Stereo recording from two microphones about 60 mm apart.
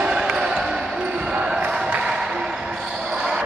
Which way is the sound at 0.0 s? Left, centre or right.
Centre.